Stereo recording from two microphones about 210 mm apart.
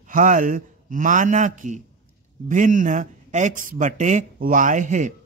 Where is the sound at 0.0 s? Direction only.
40° right (ahead or behind).